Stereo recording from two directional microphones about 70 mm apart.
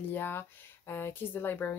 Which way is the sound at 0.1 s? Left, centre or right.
Left.